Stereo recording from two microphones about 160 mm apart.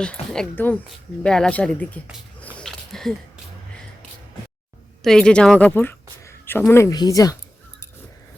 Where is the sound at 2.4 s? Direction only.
5° left (ahead or behind).